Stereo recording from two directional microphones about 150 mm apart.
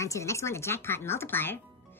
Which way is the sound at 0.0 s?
20° left (ahead or behind).